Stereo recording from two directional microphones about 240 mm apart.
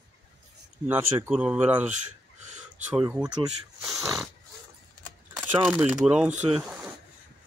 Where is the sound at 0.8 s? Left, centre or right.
Centre.